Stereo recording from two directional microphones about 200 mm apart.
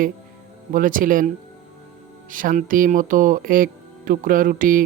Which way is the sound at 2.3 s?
45° right (ahead or behind).